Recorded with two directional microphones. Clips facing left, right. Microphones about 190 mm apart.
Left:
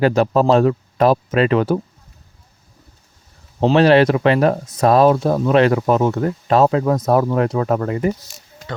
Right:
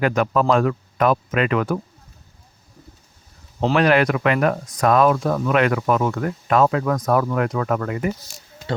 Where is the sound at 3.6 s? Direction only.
30° left (ahead or behind).